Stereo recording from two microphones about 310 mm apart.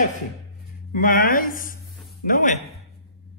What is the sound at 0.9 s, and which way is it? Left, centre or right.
A man's voice, left.